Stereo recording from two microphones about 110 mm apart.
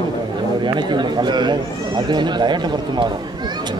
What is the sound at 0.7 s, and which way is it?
Speech, 45° right (ahead or behind).